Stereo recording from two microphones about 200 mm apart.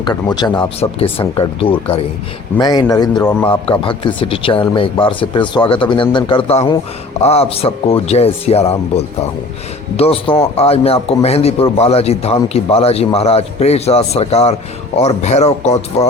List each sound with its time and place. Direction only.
0.0 s a man's voice: 20° left (ahead or behind)